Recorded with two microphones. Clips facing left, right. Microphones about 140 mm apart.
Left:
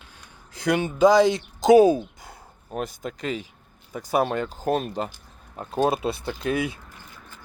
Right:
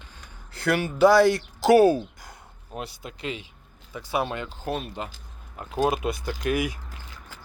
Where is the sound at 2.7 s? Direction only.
45° left (ahead or behind).